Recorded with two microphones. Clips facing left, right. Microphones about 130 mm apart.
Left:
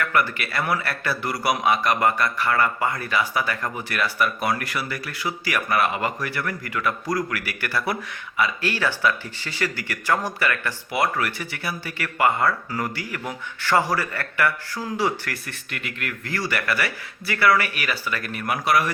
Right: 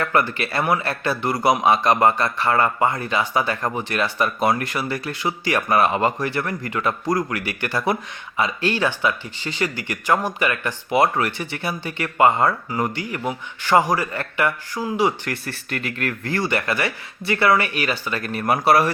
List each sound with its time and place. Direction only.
0.0 s a man's voice: 30° right (ahead or behind)
15.3 s a man's voice: 35° right (ahead or behind)